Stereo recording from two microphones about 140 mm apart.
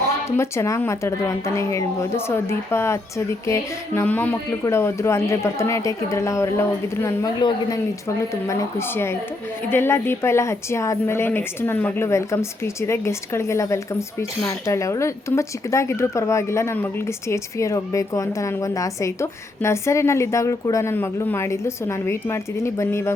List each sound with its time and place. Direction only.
0.3 s speech: 20° left (ahead or behind)
3.4 s music: 20° left (ahead or behind)
4.6 s speech: 20° left (ahead or behind)
9.6 s speech: 15° left (ahead or behind)